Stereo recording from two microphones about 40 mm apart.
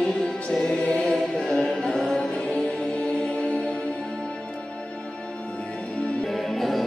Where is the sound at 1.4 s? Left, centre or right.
Left.